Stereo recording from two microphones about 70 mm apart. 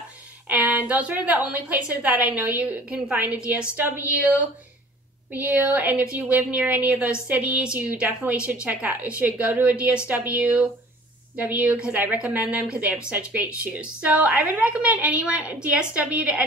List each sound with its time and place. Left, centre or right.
0.5 s a woman's voice: right
5.3 s a woman's voice: right